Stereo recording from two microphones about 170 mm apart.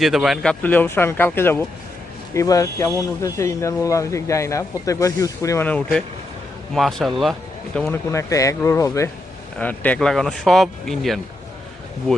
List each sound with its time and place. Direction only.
0.0 s speech: centre (ahead or behind)
0.6 s speech: 10° left (ahead or behind)
8.1 s speech: 20° left (ahead or behind); by 11.2 s centre (ahead or behind)